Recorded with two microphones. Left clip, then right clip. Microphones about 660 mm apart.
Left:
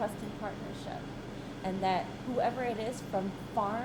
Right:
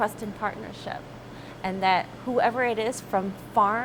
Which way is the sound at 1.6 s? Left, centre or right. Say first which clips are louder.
Right 8 dB; right.